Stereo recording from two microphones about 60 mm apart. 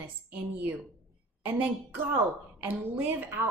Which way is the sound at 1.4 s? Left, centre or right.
Right.